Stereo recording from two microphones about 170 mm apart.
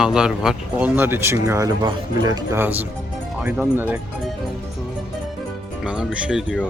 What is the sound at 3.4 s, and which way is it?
Speech, 10° right (ahead or behind).